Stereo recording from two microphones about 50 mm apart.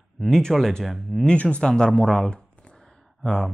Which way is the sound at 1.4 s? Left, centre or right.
Left.